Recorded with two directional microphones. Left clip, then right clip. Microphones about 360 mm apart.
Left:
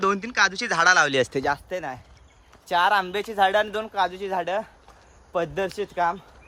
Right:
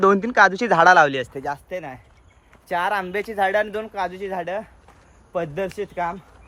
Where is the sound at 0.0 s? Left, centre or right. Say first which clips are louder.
Right 6 dB; centre.